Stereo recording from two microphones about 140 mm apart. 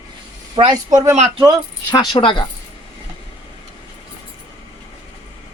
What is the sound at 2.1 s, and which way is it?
Speech, 35° left (ahead or behind).